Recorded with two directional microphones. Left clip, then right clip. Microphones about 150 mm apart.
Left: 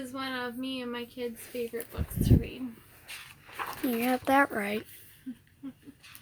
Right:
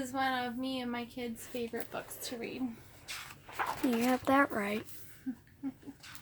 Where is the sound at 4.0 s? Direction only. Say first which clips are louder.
Left 4 dB; 15° left (ahead or behind).